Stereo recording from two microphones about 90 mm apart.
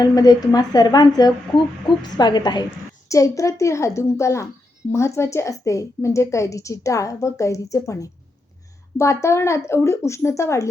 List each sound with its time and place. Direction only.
0.0 s speech: 45° left (ahead or behind)
3.1 s a woman's voice: 35° left (ahead or behind)